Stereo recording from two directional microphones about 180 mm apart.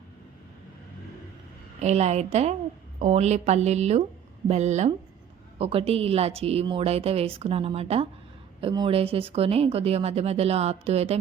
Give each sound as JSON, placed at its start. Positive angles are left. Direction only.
{"t": 1.8, "sound": "speech", "side_deg": -35}